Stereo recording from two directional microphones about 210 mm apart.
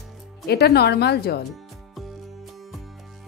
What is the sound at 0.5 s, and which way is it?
Speech, 50° left (ahead or behind).